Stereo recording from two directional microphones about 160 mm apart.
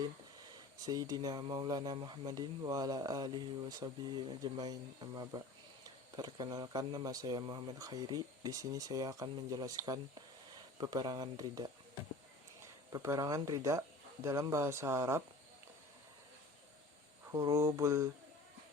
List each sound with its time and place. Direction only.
0.9 s speech: 25° right (ahead or behind)
12.9 s speech: 20° right (ahead or behind)
17.3 s speech: 20° right (ahead or behind)